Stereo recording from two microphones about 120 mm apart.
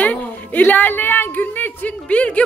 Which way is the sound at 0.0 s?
10° left (ahead or behind).